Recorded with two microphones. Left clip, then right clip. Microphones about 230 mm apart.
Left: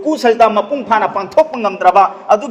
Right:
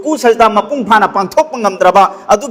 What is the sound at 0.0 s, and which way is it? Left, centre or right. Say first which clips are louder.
A man's voice: right 2 dB; right.